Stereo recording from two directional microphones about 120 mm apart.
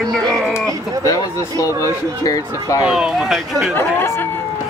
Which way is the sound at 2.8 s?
5° right (ahead or behind).